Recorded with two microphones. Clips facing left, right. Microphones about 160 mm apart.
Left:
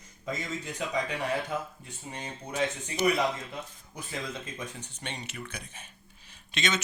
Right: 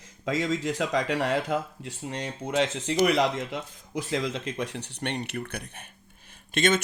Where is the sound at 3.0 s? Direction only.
80° right.